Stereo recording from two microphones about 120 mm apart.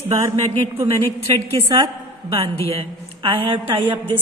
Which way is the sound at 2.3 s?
50° right (ahead or behind).